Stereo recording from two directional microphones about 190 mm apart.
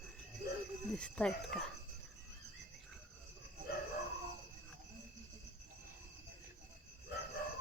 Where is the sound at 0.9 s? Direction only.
5° left (ahead or behind).